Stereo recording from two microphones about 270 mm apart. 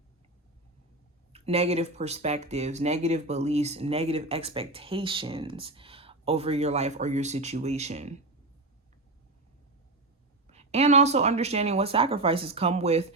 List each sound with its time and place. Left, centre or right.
1.3 s speech: right
10.4 s speech: right